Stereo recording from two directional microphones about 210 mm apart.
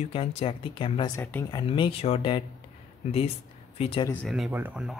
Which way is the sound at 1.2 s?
10° left (ahead or behind).